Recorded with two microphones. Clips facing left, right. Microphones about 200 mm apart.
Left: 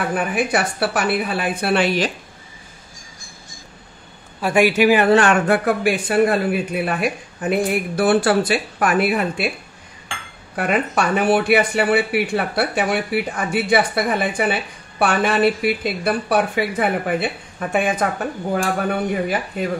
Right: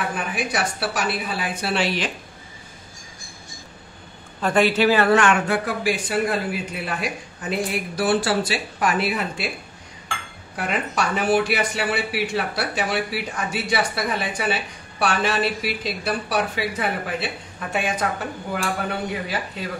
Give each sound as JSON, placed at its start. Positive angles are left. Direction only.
{"t": 0.1, "sound": "speech", "side_deg": 60}
{"t": 4.4, "sound": "a man's voice", "side_deg": 10}
{"t": 5.1, "sound": "speech", "side_deg": 35}
{"t": 5.5, "sound": "speech", "side_deg": 55}
{"t": 10.5, "sound": "speech", "side_deg": 55}